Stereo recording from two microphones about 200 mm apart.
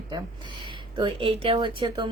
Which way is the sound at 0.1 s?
25° right (ahead or behind).